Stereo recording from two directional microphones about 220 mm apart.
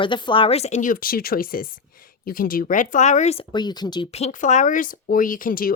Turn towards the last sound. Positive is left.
turn(degrees=40)  # may be behind; listen again after turning